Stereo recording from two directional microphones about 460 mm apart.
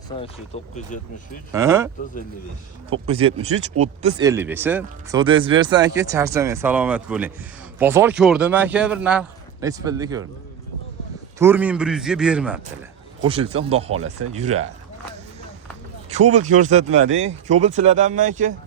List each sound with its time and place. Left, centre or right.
0.2 s speech: centre
1.5 s speech: centre
3.2 s a man's voice: centre
11.3 s a man's voice: centre
13.9 s speech: right
16.2 s speech: centre